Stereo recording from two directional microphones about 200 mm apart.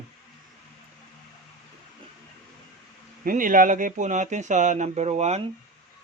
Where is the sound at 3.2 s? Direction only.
40° right (ahead or behind).